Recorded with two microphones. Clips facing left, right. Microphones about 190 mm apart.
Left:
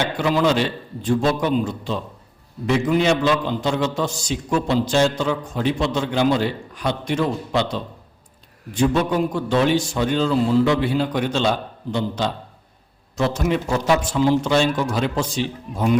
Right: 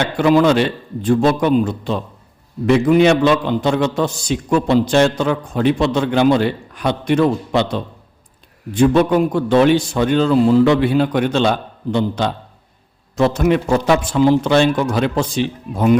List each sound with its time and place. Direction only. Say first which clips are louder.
0.2 s a man's voice: right 7 dB; 55° right (ahead or behind)